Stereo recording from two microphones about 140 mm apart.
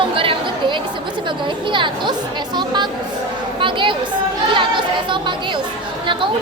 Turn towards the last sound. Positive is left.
turn(degrees=-35)  # may be behind; listen again after turning